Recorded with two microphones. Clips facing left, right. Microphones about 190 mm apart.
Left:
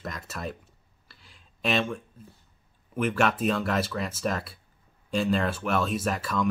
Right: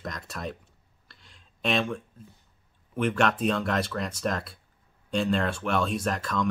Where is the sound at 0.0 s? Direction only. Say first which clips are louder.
Even; 5° left (ahead or behind).